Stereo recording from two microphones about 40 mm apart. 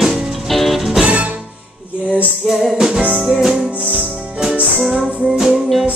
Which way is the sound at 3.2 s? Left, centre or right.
Centre.